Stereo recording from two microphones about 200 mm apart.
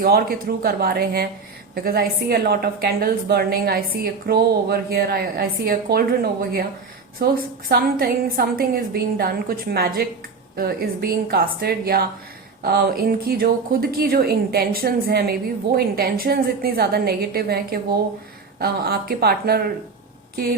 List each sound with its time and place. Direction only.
0.0 s a woman's voice: 50° right (ahead or behind)
7.7 s a woman's voice: 50° right (ahead or behind)